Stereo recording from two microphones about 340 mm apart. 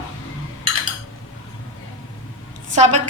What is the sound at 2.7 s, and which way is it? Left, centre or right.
Speech, right.